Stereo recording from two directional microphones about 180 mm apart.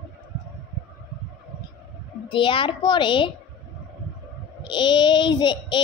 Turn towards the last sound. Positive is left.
turn(degrees=25)  # may be behind; listen again after turning